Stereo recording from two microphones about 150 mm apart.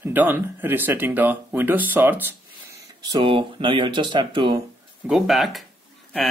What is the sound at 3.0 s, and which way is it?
Speech, 25° right (ahead or behind).